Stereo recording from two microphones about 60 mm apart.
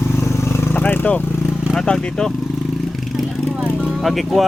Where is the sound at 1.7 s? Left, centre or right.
Centre.